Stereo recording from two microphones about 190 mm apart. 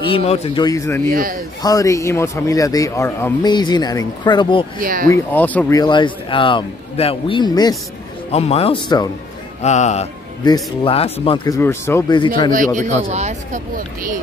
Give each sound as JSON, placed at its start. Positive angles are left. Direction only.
{"t": 0.0, "sound": "speech", "side_deg": 30}
{"t": 0.7, "sound": "speech", "side_deg": 15}
{"t": 4.7, "sound": "speech", "side_deg": -45}
{"t": 5.1, "sound": "speech", "side_deg": 10}
{"t": 5.8, "sound": "speech", "side_deg": 25}
{"t": 8.3, "sound": "speech", "side_deg": 30}
{"t": 9.6, "sound": "speech", "side_deg": 35}
{"t": 10.4, "sound": "speech", "side_deg": 25}
{"t": 12.4, "sound": "speech", "side_deg": -45}